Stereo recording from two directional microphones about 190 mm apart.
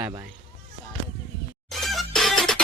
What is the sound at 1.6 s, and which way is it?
Music, centre (ahead or behind).